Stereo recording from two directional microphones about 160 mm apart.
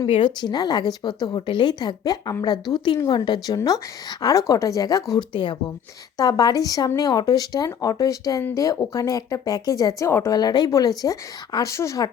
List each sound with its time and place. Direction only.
0.0 s speech: 30° left (ahead or behind)